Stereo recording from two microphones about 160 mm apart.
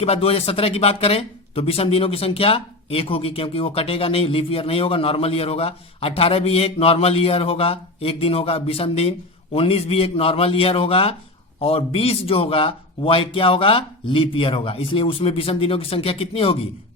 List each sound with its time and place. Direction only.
0.0 s speech: 40° left (ahead or behind)